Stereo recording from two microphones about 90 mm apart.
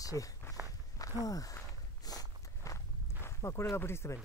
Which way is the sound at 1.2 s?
40° left (ahead or behind).